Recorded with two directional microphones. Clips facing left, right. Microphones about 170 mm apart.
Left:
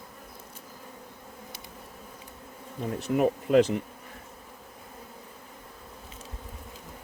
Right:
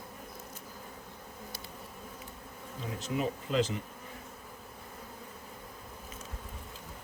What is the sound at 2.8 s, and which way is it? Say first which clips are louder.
Speech: left 8 dB; 60° left (ahead or behind).